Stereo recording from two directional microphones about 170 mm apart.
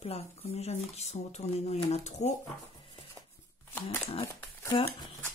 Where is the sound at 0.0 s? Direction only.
35° left (ahead or behind).